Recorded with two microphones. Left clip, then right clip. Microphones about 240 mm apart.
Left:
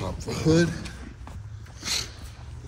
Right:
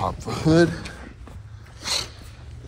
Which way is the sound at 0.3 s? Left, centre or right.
Centre.